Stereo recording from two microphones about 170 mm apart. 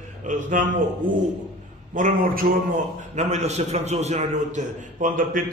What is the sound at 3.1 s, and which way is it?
A man's voice, 40° right (ahead or behind).